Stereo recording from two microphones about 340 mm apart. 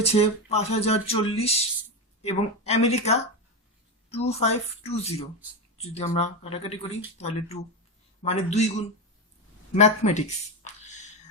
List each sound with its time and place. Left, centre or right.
0.0 s a woman's voice: centre
9.7 s speech: centre